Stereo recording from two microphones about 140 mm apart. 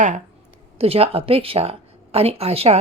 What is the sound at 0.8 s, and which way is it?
A woman's voice, 45° right (ahead or behind).